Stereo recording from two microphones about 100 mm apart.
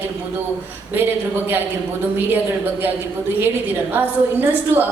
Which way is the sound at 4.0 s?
20° right (ahead or behind).